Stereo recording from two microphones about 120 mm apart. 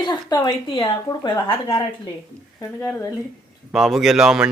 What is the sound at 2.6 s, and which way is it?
Speech, 15° left (ahead or behind).